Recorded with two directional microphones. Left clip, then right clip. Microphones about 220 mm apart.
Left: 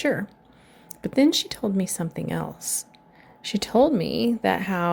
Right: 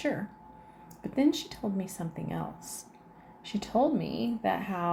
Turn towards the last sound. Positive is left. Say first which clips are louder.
# left 7 dB
turn(degrees=50)  # may be behind; listen again after turning